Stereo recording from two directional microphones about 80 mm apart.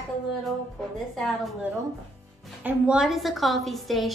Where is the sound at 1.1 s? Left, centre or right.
Centre.